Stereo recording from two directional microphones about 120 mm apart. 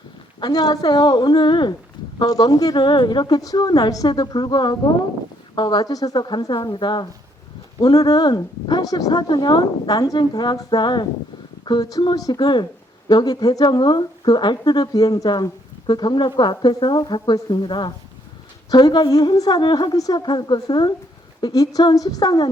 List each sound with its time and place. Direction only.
0.3 s a woman's voice: 35° left (ahead or behind)